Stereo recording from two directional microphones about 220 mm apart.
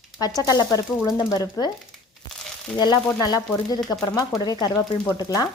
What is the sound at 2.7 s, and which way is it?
A woman's voice, 20° left (ahead or behind).